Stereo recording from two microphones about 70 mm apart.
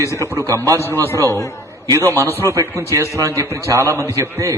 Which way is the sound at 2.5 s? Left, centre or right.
Right.